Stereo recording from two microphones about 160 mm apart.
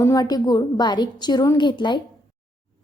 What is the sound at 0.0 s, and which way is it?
Speech, 25° left (ahead or behind).